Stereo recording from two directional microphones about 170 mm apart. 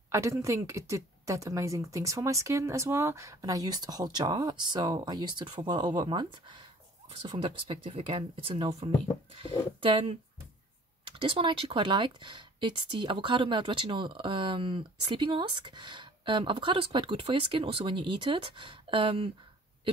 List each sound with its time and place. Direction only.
0.1 s speech: 15° right (ahead or behind)
11.1 s speech: 35° right (ahead or behind)